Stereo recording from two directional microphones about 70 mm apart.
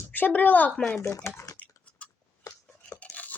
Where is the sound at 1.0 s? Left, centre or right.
Left.